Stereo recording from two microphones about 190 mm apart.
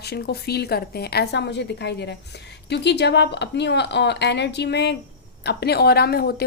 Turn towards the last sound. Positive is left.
turn(degrees=55)  # may be behind; listen again after turning